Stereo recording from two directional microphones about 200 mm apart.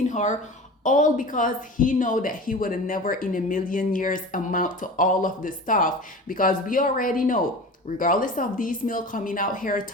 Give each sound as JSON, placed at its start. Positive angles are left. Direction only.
{"t": 0.1, "sound": "a woman's voice", "side_deg": 35}